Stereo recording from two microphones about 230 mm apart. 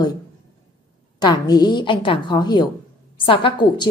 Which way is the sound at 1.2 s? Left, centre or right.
Centre.